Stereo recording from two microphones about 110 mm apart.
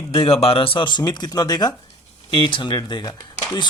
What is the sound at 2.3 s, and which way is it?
Speech, 50° left (ahead or behind).